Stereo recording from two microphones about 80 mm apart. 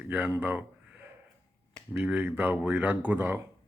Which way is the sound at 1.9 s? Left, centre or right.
Right.